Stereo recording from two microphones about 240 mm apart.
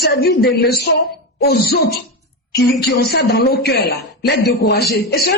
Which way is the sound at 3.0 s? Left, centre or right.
Left.